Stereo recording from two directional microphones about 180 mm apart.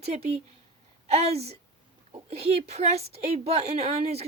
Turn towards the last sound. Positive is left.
turn(degrees=-35)  # may be behind; listen again after turning